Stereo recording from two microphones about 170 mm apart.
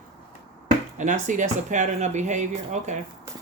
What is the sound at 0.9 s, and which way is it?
Speech, 50° right (ahead or behind).